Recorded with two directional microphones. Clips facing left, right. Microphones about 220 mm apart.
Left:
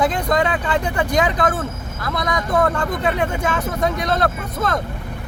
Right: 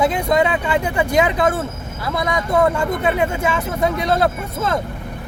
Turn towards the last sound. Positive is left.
turn(degrees=-5)  # may be behind; listen again after turning